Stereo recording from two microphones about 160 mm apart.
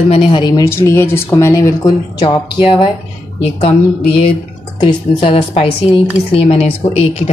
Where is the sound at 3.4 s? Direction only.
35° left (ahead or behind).